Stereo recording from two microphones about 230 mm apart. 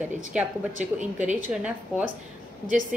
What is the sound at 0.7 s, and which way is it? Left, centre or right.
Speech, right.